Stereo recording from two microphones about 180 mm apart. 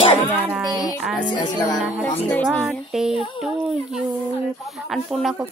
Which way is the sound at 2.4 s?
Centre (ahead or behind).